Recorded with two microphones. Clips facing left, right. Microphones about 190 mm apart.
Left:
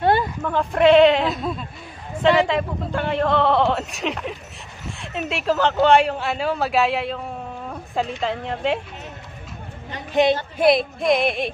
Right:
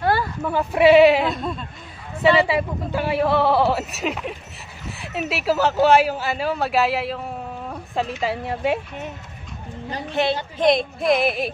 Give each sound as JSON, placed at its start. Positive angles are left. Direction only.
{"t": 0.0, "sound": "a sound", "side_deg": 20}
{"t": 0.4, "sound": "speech", "side_deg": -10}
{"t": 10.6, "sound": "speech", "side_deg": 0}